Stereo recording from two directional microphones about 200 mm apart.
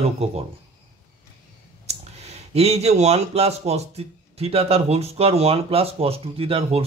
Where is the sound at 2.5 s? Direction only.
30° right (ahead or behind).